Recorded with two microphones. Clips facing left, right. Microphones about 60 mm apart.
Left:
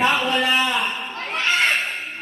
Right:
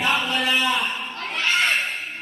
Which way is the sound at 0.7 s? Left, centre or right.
Centre.